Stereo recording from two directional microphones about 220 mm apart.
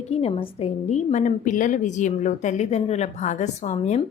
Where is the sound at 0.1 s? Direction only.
25° left (ahead or behind).